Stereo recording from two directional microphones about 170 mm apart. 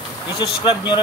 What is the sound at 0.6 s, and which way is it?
Speech, 30° left (ahead or behind).